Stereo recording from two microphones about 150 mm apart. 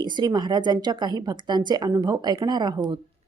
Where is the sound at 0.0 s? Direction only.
30° right (ahead or behind).